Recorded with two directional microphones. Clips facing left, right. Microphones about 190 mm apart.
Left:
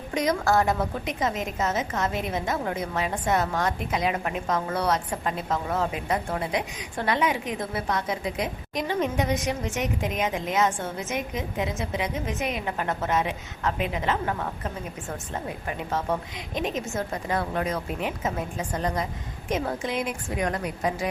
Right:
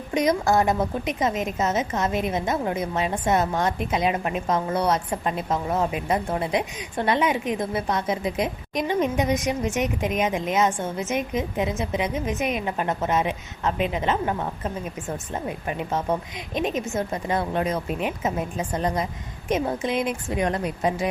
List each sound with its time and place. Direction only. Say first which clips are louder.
0.1 s a woman's voice: right 3 dB; 20° right (ahead or behind)